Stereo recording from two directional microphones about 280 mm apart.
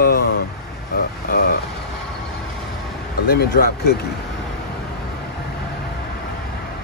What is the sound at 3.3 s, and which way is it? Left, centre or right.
Speech, left.